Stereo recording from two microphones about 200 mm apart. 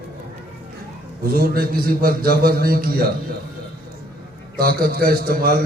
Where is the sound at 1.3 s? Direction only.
45° right (ahead or behind).